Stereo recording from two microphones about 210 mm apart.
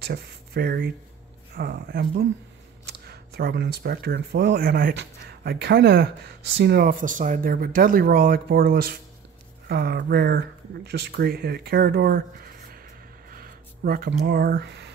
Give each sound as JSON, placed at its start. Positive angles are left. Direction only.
{"t": 0.0, "sound": "speech", "side_deg": -50}
{"t": 13.3, "sound": "speech", "side_deg": -45}